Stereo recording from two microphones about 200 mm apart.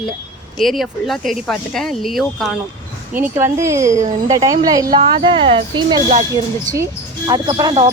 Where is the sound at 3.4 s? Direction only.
15° right (ahead or behind).